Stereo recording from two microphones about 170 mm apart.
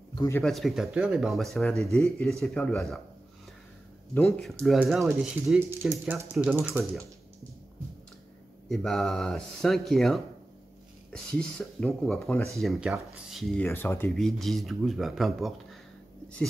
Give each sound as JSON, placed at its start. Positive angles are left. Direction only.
{"t": 0.1, "sound": "a sound", "side_deg": 20}
{"t": 0.4, "sound": "speech", "side_deg": 0}
{"t": 4.1, "sound": "speech", "side_deg": 5}
{"t": 5.6, "sound": "speech", "side_deg": -15}
{"t": 8.6, "sound": "speech", "side_deg": 0}
{"t": 13.7, "sound": "speech", "side_deg": 15}
{"t": 14.2, "sound": "speech", "side_deg": 0}